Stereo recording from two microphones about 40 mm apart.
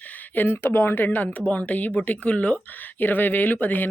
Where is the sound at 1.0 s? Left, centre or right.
Left.